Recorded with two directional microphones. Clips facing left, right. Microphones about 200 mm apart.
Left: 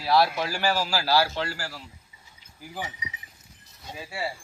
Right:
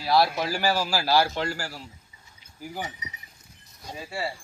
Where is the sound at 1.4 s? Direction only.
45° right (ahead or behind).